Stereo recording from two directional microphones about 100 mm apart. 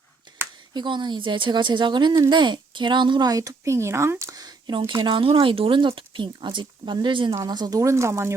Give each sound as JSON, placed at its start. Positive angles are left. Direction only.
{"t": 0.7, "sound": "speech", "side_deg": -50}
{"t": 7.3, "sound": "speech", "side_deg": -40}